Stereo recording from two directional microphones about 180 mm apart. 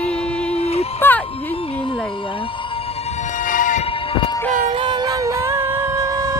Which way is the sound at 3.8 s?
30° left (ahead or behind).